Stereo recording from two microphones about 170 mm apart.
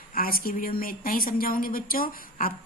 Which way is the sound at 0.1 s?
60° left (ahead or behind).